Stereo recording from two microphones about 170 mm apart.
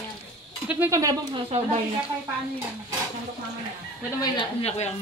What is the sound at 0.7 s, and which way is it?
Speech, 15° right (ahead or behind).